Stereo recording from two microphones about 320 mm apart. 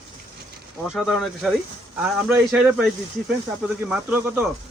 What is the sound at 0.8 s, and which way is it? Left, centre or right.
Speech, centre.